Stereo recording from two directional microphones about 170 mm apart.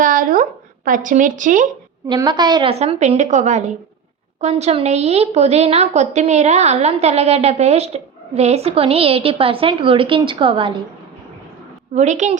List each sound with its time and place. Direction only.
0.0 s a sound: 50° right (ahead or behind)
0.9 s speech: 50° right (ahead or behind)
2.0 s a woman's voice: 25° right (ahead or behind)
11.9 s speech: 45° right (ahead or behind)